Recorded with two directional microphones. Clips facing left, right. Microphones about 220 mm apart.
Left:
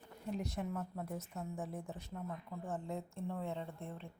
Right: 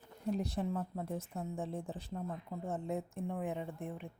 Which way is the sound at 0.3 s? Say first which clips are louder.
Right 2 dB; 35° right (ahead or behind).